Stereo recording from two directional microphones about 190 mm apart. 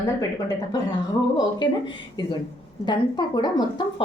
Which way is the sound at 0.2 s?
20° left (ahead or behind).